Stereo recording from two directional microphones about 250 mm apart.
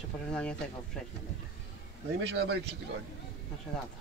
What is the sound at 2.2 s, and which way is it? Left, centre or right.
Speech, right.